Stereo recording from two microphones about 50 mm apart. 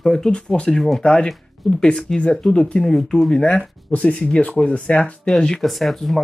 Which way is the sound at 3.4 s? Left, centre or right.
Left.